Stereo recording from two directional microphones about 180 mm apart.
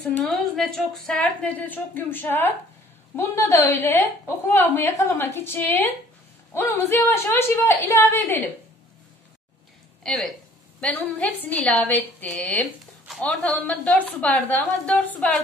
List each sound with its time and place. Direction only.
0.0 s a woman's voice: centre (ahead or behind)
10.0 s a woman's voice: centre (ahead or behind)